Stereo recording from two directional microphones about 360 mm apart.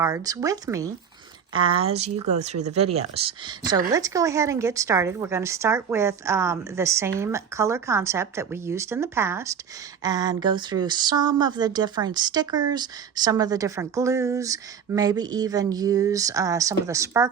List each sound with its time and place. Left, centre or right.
0.0 s speech: centre